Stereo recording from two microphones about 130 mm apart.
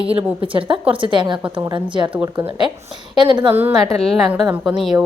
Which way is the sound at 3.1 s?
35° right (ahead or behind).